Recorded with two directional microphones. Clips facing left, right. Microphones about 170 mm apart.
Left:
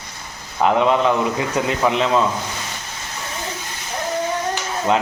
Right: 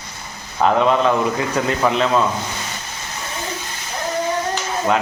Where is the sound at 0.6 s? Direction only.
15° left (ahead or behind).